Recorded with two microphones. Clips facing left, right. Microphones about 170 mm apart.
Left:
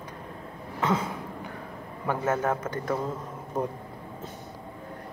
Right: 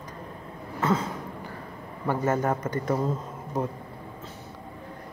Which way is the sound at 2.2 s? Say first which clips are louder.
Right 1 dB; centre (ahead or behind).